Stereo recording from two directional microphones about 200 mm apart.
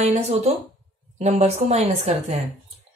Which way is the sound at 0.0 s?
35° right (ahead or behind).